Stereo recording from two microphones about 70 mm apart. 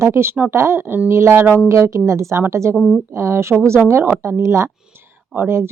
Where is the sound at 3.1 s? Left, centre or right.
Right.